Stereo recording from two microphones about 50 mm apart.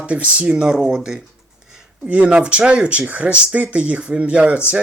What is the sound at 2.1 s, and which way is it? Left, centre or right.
Speech, right.